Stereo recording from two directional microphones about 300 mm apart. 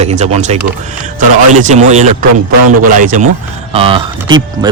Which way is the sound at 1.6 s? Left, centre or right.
Right.